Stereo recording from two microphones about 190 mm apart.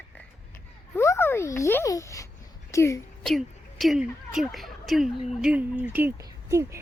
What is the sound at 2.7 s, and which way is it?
Speech, 15° left (ahead or behind).